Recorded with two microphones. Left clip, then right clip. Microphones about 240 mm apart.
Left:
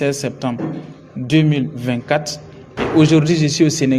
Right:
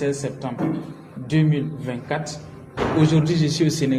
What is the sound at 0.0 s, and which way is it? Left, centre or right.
A man's voice, left.